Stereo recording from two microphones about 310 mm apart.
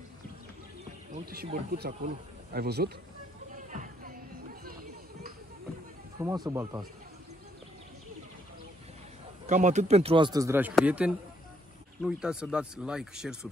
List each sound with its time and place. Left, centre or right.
1.1 s speech: right
3.5 s music: right
6.1 s a man's voice: centre
9.5 s a man's voice: right; by 13.5 s centre